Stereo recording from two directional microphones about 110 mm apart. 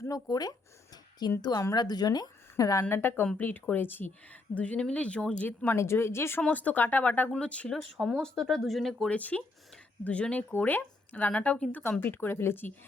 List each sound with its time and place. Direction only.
0.0 s a woman's voice: 35° left (ahead or behind)
2.8 s a woman's voice: 20° left (ahead or behind)
7.8 s speech: centre (ahead or behind); by 12.7 s 20° left (ahead or behind)